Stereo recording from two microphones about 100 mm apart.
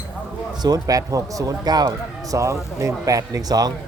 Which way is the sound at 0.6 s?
40° right (ahead or behind).